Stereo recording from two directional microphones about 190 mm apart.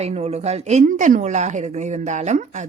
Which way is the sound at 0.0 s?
35° right (ahead or behind).